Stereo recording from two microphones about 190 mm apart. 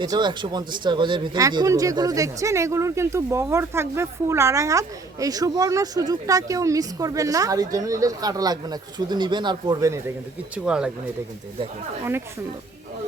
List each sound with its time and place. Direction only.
0.0 s a man's voice: 25° right (ahead or behind)
10.5 s speech: 5° right (ahead or behind)